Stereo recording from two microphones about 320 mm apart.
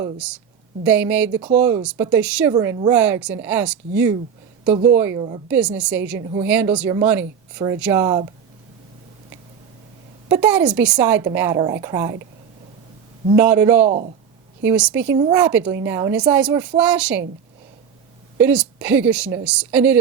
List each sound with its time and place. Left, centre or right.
0.0 s a woman's voice: centre
10.2 s a woman's voice: centre
13.3 s a woman's voice: centre
13.8 s speech: right
14.6 s speech: centre
18.3 s speech: centre